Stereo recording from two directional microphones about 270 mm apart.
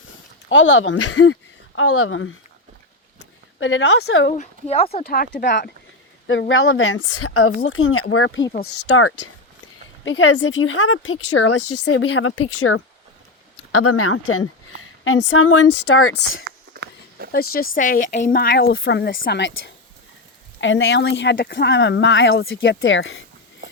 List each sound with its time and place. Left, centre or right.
0.5 s a woman's voice: left
3.2 s a sound: left
4.3 s speech: left
5.0 s a woman's voice: left
10.0 s a woman's voice: left
11.8 s a woman's voice: left
16.7 s a sound: right
17.3 s speech: left